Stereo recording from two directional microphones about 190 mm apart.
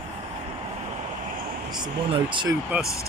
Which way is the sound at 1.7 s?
25° right (ahead or behind).